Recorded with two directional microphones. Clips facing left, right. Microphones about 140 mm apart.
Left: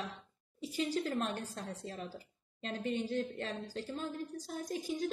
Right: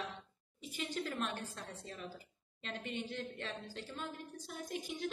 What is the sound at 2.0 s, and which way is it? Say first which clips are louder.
A woman's voice: left 3 dB; 40° left (ahead or behind).